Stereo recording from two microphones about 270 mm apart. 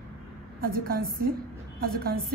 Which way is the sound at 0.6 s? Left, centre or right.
Right.